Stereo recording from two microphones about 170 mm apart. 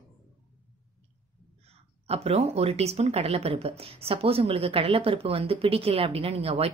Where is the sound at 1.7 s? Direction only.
35° right (ahead or behind).